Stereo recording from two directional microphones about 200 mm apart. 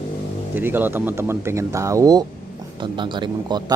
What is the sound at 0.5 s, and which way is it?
Speech, 10° right (ahead or behind).